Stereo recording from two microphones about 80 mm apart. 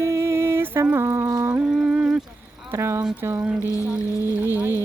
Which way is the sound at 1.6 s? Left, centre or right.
Centre.